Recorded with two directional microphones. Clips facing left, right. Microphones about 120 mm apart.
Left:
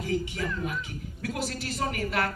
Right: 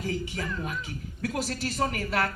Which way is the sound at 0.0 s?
40° right (ahead or behind).